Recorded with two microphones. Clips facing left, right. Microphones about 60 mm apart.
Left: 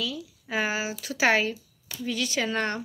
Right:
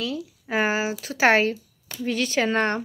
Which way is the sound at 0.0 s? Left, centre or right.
Right.